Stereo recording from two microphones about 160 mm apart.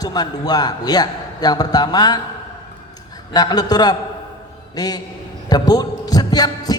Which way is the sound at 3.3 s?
25° left (ahead or behind).